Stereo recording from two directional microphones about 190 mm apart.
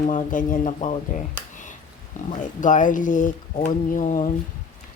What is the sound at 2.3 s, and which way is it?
Speech, 40° left (ahead or behind).